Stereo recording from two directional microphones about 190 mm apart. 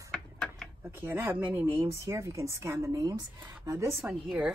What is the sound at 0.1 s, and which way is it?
Mechanisms, 5° left (ahead or behind).